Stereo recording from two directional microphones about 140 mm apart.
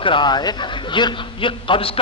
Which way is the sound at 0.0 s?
35° left (ahead or behind).